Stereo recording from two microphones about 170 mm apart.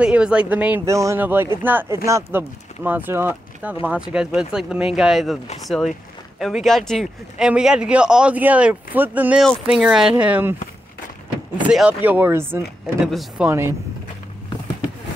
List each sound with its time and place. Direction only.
0.0 s a man's voice: 5° right (ahead or behind)
11.6 s speech: 5° right (ahead or behind)
13.0 s a man's voice: centre (ahead or behind)
13.5 s speech: 15° right (ahead or behind)